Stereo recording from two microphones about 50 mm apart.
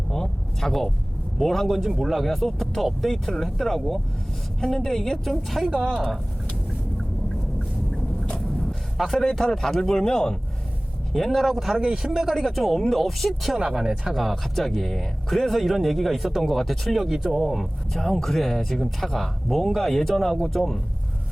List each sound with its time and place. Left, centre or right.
0.1 s speech: centre
1.9 s a man's voice: centre
8.3 s vehicle: left
9.2 s a man's voice: centre
11.1 s speech: centre
12.3 s speech: centre
13.7 s speech: centre
14.1 s speech: centre